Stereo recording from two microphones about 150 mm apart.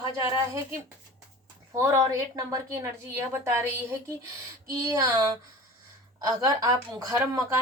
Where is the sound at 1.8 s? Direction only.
20° right (ahead or behind).